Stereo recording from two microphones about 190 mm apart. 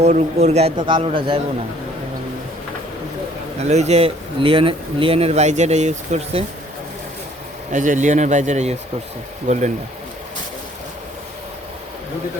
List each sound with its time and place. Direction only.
0.0 s speech: 35° right (ahead or behind)
3.6 s speech: 35° right (ahead or behind)
7.7 s speech: 40° right (ahead or behind)